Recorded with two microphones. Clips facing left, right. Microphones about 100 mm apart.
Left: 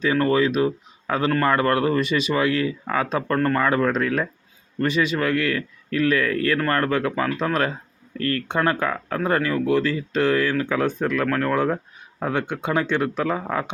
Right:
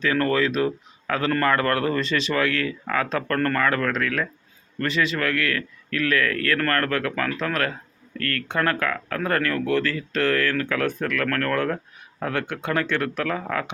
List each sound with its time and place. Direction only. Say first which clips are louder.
0.0 s speech: left 2 dB; 15° left (ahead or behind)